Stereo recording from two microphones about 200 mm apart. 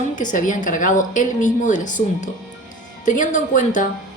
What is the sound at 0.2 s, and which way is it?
Speech, 40° left (ahead or behind).